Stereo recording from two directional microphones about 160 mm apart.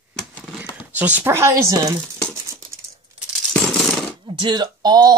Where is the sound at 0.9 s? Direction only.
10° right (ahead or behind).